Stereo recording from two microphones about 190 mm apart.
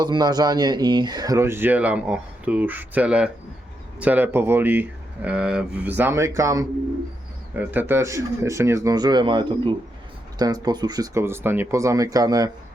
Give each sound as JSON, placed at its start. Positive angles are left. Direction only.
{"t": 0.0, "sound": "speech", "side_deg": -20}